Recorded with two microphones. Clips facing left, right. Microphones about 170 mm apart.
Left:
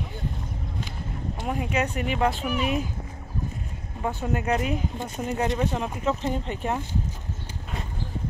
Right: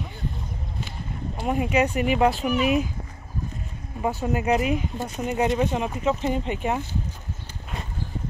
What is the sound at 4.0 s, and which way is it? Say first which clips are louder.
Speech: right 3 dB; 5° right (ahead or behind).